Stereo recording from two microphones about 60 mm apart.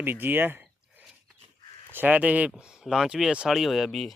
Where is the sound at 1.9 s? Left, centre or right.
Right.